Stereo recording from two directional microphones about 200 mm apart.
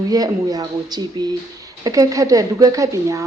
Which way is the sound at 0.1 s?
20° right (ahead or behind).